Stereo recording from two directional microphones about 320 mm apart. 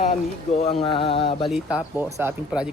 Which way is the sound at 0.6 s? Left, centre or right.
Centre.